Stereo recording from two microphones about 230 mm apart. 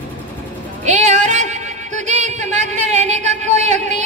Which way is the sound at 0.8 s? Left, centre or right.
Right.